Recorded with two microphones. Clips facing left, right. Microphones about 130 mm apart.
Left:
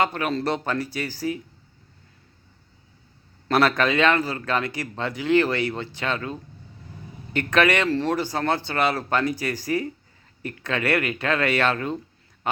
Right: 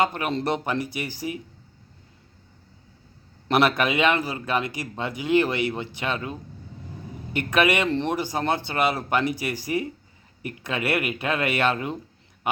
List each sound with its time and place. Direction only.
0.0 s a man's voice: 15° right (ahead or behind)
3.5 s a man's voice: 15° right (ahead or behind)